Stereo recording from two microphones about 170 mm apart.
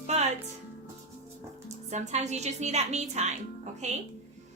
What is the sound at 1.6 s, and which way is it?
A woman's voice, 45° right (ahead or behind).